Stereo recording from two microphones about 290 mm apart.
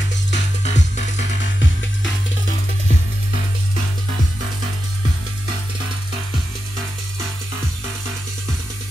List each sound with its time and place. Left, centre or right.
0.3 s music: left